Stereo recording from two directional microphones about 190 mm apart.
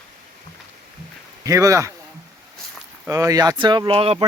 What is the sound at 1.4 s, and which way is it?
Speech, 15° right (ahead or behind).